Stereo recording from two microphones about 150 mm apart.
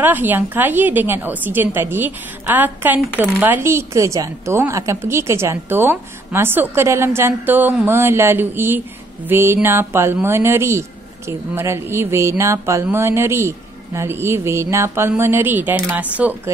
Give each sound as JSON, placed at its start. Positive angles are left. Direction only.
{"t": 0.0, "sound": "a woman's voice", "side_deg": -15}